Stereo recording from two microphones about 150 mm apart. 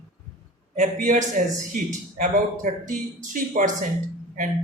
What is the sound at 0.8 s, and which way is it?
Speech, 60° right (ahead or behind).